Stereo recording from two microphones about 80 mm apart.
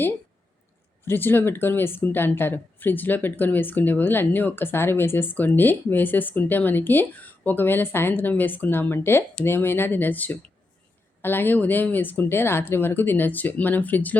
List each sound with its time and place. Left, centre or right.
1.0 s a woman's voice: left